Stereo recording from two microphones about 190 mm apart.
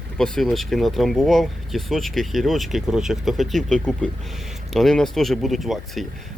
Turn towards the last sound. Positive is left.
turn(degrees=0)  # may be behind; listen again after turning